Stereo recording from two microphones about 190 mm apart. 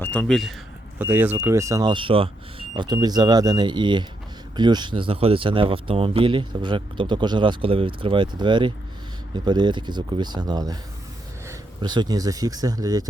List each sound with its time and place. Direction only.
0.0 s speech: 10° left (ahead or behind)
0.9 s speech: 10° right (ahead or behind)